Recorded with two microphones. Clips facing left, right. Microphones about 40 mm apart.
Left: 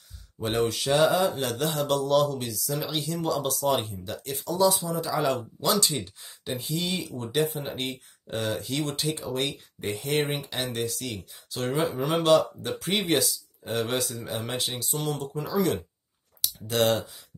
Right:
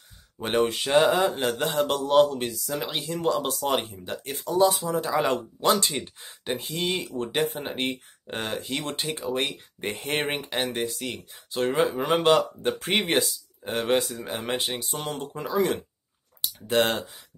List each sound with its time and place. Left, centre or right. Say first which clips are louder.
0.4 s speech: right 2 dB; right
10.6 s speech: right 2 dB; right